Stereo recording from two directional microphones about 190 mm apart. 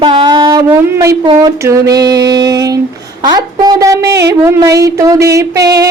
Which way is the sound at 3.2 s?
20° right (ahead or behind).